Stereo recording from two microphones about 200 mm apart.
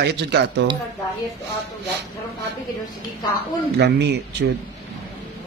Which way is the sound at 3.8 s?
60° right (ahead or behind).